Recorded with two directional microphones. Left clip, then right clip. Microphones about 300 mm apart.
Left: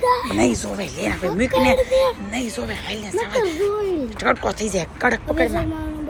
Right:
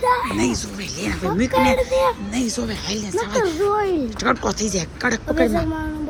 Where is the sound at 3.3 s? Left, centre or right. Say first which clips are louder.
Right 2 dB; centre.